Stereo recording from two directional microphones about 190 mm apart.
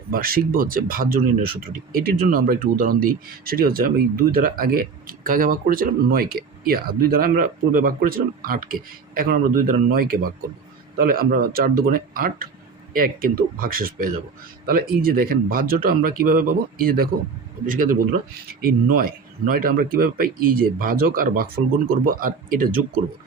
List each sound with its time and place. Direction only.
0.1 s speech: 50° right (ahead or behind)